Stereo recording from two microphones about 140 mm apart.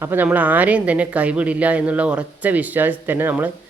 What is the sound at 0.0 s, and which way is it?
Speech, 15° right (ahead or behind).